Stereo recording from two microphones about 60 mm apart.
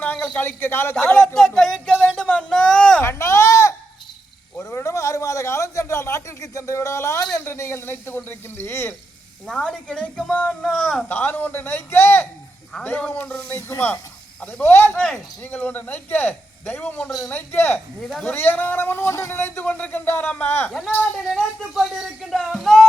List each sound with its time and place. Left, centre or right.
0.0 s a sound: left
0.3 s speech: left
1.1 s a woman's voice: centre
3.0 s a sound: left
4.7 s a man's voice: left
9.5 s a woman's voice: centre
11.1 s speech: left
13.1 s speech: left
13.7 s speech: left
17.1 s speech: centre
17.3 s speech: left
20.7 s speech: centre
22.4 s a sound: centre